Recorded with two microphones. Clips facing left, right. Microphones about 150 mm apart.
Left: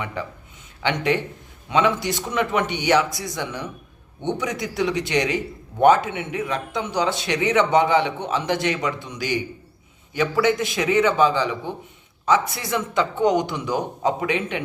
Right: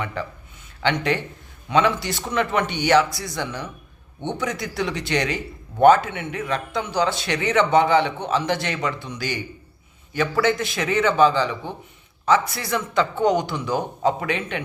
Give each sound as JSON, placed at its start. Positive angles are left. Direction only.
{"t": 0.0, "sound": "a man's voice", "side_deg": 15}